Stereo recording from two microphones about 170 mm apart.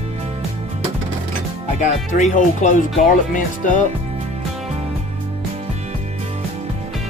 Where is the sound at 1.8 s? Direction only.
45° left (ahead or behind).